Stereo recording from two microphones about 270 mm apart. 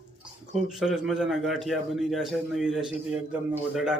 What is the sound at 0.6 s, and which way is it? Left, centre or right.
A man's voice, centre.